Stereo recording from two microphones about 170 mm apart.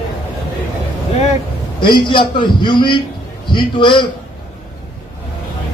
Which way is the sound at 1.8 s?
30° left (ahead or behind).